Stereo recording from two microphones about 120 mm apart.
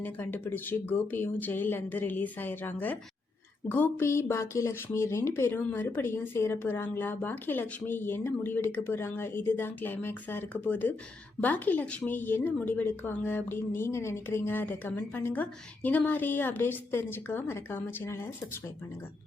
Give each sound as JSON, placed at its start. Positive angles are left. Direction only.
{"t": 0.0, "sound": "speech", "side_deg": 15}